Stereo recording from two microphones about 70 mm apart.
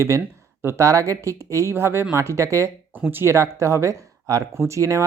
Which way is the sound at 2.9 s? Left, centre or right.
Right.